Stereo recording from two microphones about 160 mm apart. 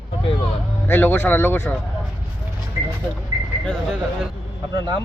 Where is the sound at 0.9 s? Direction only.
10° left (ahead or behind).